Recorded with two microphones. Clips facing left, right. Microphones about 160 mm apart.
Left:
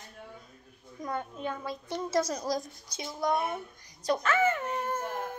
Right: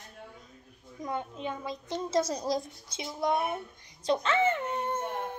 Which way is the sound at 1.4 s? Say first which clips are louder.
Even; 15° right (ahead or behind).